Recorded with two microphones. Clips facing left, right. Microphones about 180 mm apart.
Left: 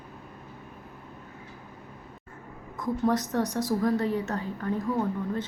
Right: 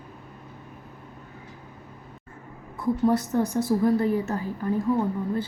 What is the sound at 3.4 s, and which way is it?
Speech, 30° right (ahead or behind).